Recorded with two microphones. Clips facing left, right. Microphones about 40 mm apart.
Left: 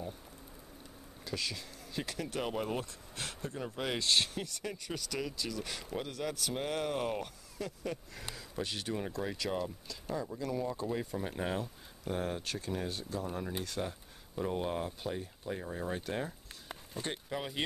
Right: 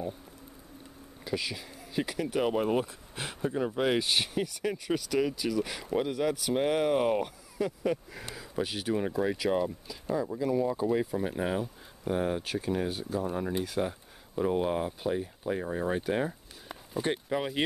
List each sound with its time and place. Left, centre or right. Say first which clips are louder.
1.2 s speech: right 5 dB; centre